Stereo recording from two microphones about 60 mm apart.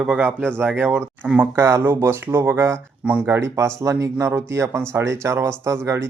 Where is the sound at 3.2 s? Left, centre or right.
Right.